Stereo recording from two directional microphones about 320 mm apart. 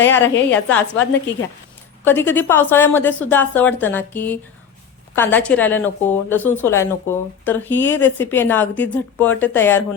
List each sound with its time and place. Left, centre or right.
0.1 s a woman's voice: centre
2.0 s a woman's voice: centre